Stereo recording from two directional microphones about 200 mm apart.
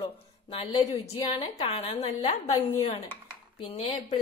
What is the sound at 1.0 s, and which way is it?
A woman's voice, 25° left (ahead or behind).